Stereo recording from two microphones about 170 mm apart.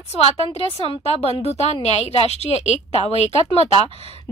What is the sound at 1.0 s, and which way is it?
A woman's voice, 35° left (ahead or behind).